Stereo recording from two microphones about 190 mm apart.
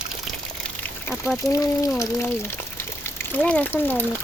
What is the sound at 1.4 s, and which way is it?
Speech, 15° left (ahead or behind).